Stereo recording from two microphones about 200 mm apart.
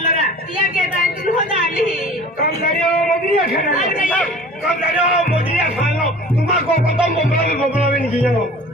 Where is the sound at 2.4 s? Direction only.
45° left (ahead or behind).